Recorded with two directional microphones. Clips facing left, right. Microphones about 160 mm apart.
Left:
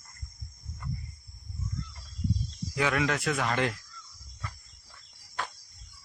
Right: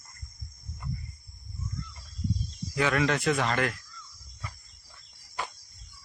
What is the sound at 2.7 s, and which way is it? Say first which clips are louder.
Speech: right 2 dB; 10° left (ahead or behind).